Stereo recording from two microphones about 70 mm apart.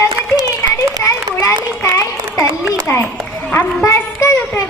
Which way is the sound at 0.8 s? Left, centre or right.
Left.